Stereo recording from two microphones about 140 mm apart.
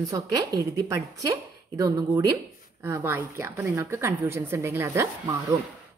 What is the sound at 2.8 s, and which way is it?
A woman's voice, 15° right (ahead or behind).